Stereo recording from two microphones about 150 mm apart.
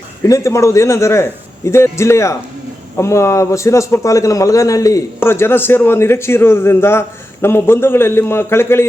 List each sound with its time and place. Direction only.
0.3 s a man's voice: 20° left (ahead or behind)